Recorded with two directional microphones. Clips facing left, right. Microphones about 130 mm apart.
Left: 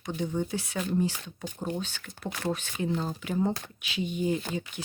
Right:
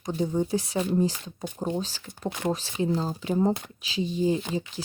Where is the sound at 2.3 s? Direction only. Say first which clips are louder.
Right 3 dB; 20° right (ahead or behind).